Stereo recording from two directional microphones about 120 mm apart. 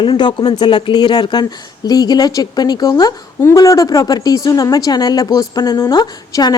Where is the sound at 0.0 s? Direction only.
40° left (ahead or behind).